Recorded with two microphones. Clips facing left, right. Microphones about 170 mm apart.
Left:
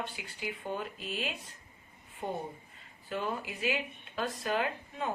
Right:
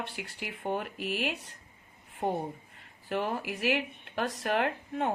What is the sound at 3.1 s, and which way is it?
A woman's voice, 70° right (ahead or behind).